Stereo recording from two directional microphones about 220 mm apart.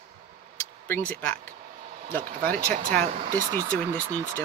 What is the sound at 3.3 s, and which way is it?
Speech, 15° right (ahead or behind).